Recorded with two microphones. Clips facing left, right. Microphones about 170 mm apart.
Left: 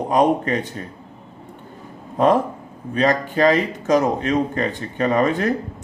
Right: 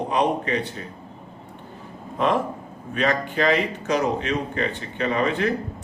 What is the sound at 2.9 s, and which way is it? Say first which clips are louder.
Speech: left 5 dB; 40° left (ahead or behind).